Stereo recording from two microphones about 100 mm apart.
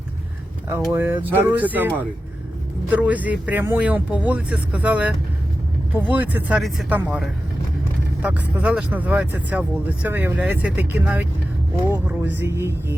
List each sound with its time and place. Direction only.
0.7 s speech: 25° right (ahead or behind)
6.6 s speech: centre (ahead or behind)
8.2 s speech: 15° right (ahead or behind)